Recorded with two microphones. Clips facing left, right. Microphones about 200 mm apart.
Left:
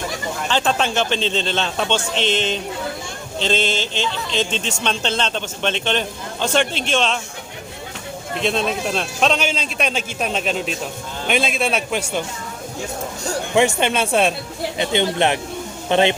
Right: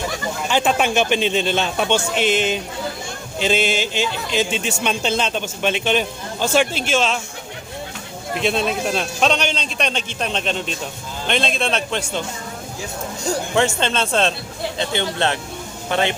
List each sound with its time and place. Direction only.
0.4 s a man's voice: 10° right (ahead or behind)
8.4 s a man's voice: 5° right (ahead or behind)
13.6 s a man's voice: 15° left (ahead or behind)